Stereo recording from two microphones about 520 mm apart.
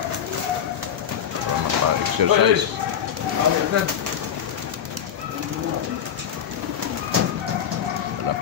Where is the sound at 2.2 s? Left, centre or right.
Right.